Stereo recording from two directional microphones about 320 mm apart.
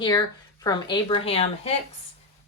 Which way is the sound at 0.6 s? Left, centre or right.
Centre.